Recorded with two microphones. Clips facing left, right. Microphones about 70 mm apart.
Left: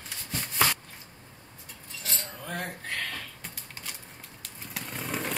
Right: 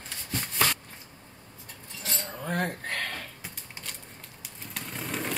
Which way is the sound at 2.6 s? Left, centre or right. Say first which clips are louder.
Right 3 dB; right.